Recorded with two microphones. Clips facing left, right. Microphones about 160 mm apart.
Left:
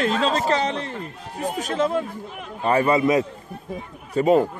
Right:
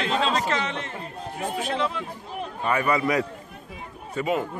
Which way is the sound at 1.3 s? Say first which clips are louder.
Left 2 dB; 40° left (ahead or behind).